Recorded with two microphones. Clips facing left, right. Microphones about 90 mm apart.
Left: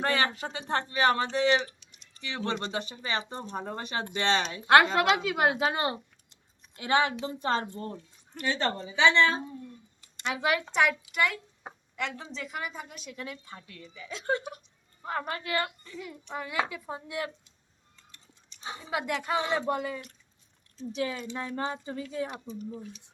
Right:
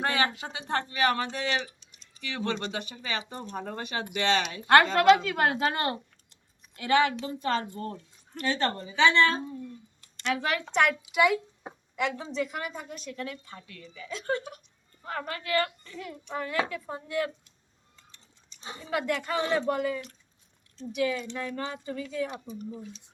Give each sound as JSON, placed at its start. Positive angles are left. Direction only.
{"t": 0.0, "sound": "speech", "side_deg": 35}
{"t": 4.9, "sound": "a woman's voice", "side_deg": 5}
{"t": 11.9, "sound": "a woman's voice", "side_deg": -5}
{"t": 15.8, "sound": "a woman's voice", "side_deg": 5}
{"t": 18.9, "sound": "a woman's voice", "side_deg": 15}